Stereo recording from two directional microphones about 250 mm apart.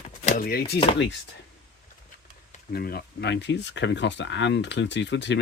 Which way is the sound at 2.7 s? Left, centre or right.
Left.